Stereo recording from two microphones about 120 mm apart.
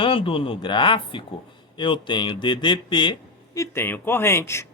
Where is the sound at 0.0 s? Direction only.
45° left (ahead or behind).